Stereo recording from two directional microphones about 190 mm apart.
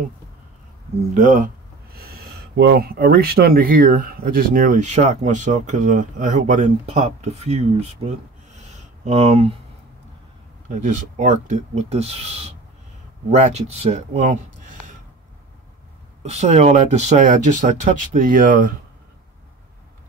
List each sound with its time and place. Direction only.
1.1 s speech: 40° right (ahead or behind)
10.7 s speech: 40° right (ahead or behind)
16.2 s speech: 35° right (ahead or behind)